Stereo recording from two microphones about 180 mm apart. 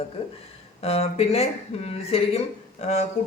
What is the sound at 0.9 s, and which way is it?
A woman's voice, 35° left (ahead or behind).